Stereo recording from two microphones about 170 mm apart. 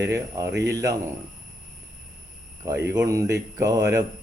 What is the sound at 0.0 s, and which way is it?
Speech, 15° right (ahead or behind).